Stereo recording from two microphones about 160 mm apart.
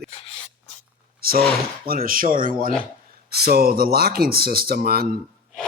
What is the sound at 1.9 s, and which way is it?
Speech, 65° right (ahead or behind).